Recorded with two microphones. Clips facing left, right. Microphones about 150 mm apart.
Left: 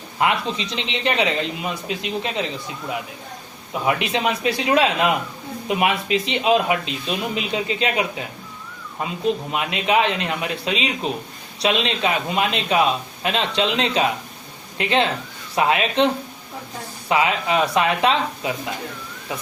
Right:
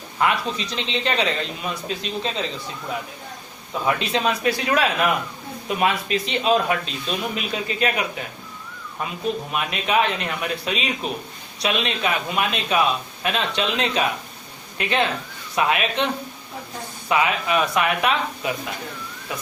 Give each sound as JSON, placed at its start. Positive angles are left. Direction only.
{"t": 0.2, "sound": "speech", "side_deg": 25}
{"t": 3.8, "sound": "speech", "side_deg": 20}
{"t": 9.0, "sound": "speech", "side_deg": 25}
{"t": 17.1, "sound": "speech", "side_deg": 25}